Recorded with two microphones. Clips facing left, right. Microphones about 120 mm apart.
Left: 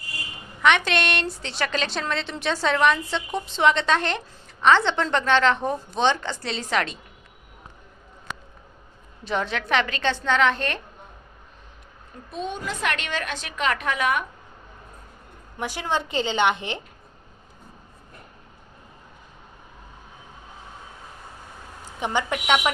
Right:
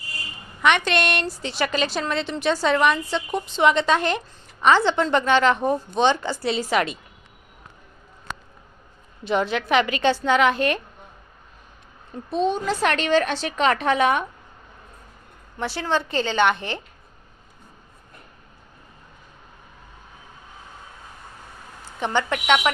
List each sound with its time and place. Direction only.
0.9 s a woman's voice: centre (ahead or behind)
9.2 s a woman's voice: 5° right (ahead or behind)
12.3 s a woman's voice: 30° right (ahead or behind)
15.5 s a woman's voice: 15° left (ahead or behind)
22.0 s a woman's voice: 10° left (ahead or behind)